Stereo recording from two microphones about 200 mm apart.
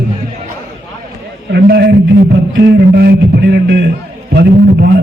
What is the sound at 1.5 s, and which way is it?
A man's voice, 55° right (ahead or behind).